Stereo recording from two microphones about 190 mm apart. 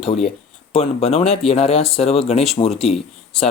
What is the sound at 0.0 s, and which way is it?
Speech, 35° left (ahead or behind).